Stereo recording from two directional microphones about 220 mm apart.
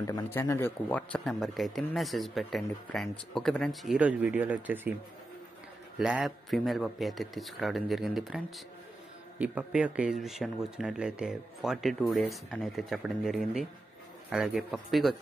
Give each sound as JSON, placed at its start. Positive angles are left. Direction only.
{"t": 0.0, "sound": "a man's voice", "side_deg": 15}
{"t": 5.9, "sound": "a man's voice", "side_deg": -5}